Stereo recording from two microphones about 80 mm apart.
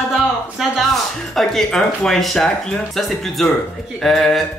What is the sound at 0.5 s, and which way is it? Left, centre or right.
Speech, centre.